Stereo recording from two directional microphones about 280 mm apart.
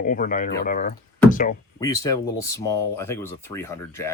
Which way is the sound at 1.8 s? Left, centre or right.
Centre.